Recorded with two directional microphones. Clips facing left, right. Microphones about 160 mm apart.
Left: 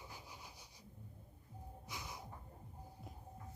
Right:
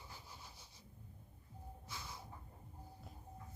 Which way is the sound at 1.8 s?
15° left (ahead or behind).